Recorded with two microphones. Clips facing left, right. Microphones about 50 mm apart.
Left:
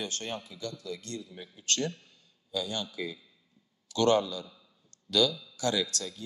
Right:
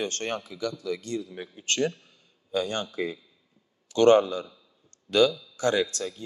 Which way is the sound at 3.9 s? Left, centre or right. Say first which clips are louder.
Right 7 dB; right.